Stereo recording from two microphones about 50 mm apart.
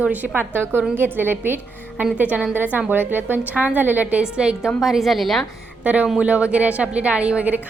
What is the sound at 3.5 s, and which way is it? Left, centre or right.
Speech, right.